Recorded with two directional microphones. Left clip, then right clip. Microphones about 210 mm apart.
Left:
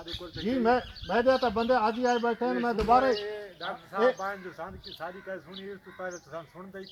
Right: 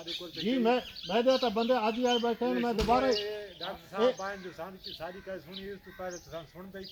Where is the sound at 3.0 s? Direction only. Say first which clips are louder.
Left 3 dB; 5° right (ahead or behind).